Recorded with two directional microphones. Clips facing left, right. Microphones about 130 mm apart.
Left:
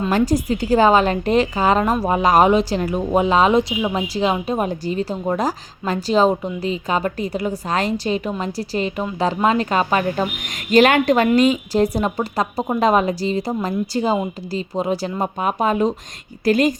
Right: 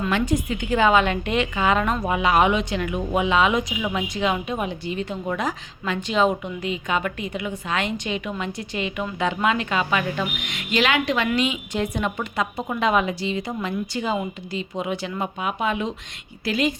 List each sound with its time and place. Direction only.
0.1 s a woman's voice: 35° left (ahead or behind)